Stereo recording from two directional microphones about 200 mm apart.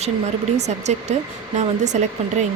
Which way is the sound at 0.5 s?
35° right (ahead or behind).